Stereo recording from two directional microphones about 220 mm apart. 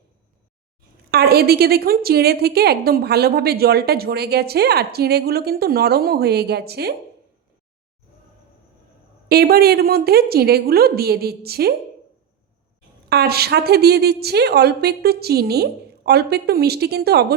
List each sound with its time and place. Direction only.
1.1 s a woman's voice: 45° right (ahead or behind)
9.3 s a woman's voice: 45° right (ahead or behind)
13.1 s a woman's voice: 45° right (ahead or behind)